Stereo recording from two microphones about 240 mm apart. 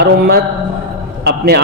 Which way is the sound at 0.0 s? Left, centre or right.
Right.